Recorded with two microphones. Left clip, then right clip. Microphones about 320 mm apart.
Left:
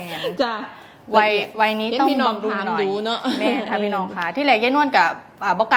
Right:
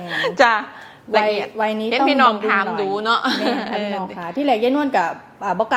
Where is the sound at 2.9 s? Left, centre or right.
Right.